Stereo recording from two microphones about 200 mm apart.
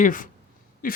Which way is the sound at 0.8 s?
45° left (ahead or behind).